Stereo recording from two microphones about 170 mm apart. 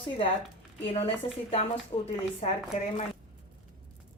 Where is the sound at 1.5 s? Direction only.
35° left (ahead or behind).